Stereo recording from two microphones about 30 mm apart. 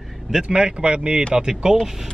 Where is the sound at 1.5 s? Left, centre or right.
Right.